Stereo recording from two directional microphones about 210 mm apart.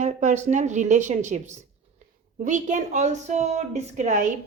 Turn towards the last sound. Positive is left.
turn(degrees=-35)  # may be behind; listen again after turning